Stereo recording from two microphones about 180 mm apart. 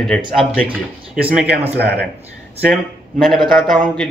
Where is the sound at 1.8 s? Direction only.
65° right (ahead or behind).